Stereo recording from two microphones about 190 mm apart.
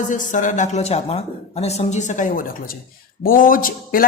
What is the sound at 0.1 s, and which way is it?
A woman's voice, 40° left (ahead or behind).